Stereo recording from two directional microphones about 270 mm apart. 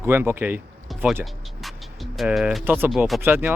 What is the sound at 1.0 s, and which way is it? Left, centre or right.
Music, centre.